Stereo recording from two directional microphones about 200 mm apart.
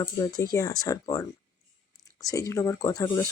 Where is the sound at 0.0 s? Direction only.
20° left (ahead or behind).